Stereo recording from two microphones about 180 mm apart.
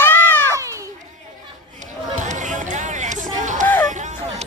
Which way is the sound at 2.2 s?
40° right (ahead or behind).